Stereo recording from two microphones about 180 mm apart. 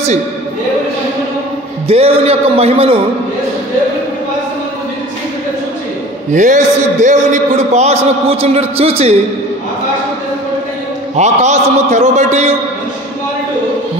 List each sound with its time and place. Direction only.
1.9 s a man's voice: 35° right (ahead or behind)
6.3 s a man's voice: 45° right (ahead or behind)
11.1 s a man's voice: 40° right (ahead or behind)